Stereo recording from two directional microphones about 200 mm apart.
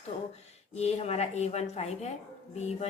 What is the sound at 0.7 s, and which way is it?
Speech, 35° left (ahead or behind).